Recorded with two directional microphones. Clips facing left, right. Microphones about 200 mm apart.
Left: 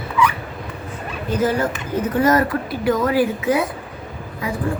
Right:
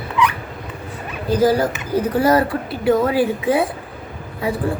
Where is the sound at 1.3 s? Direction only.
35° right (ahead or behind).